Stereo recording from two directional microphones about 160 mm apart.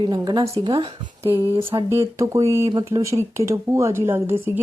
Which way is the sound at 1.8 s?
15° right (ahead or behind).